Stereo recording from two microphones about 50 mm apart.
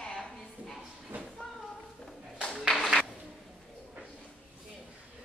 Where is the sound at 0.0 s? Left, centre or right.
Centre.